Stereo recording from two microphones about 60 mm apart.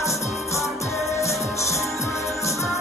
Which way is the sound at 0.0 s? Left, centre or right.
Left.